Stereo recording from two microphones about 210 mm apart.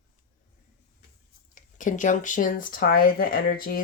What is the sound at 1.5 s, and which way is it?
Speech, 35° left (ahead or behind).